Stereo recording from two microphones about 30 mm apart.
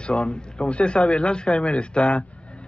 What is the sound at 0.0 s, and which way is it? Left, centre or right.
Speech, left.